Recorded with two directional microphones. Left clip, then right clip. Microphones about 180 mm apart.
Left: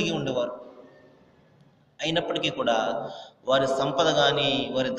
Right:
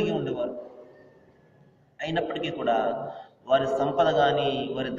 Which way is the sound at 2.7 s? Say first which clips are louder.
Right 3 dB; 30° left (ahead or behind).